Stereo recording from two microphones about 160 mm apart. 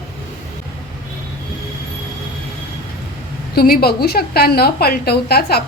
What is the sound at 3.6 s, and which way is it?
A woman's voice, 70° left (ahead or behind).